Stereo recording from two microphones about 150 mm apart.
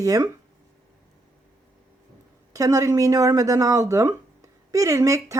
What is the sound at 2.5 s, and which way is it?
Speech, 20° right (ahead or behind).